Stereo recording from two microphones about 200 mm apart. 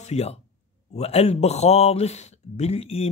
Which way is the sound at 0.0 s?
35° left (ahead or behind).